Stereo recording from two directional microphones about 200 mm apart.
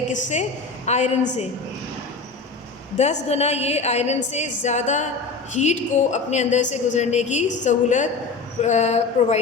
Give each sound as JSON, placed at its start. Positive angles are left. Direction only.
{"t": 0.1, "sound": "a woman's voice", "side_deg": 35}
{"t": 3.2, "sound": "a woman's voice", "side_deg": 30}